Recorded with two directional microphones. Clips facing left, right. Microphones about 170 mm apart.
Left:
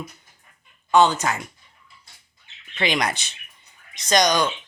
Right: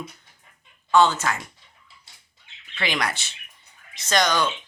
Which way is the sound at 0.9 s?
15° left (ahead or behind).